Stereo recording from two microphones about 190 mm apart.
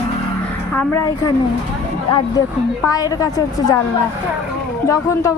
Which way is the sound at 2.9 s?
20° left (ahead or behind).